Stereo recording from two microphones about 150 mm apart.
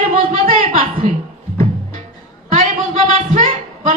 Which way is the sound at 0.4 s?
65° right (ahead or behind).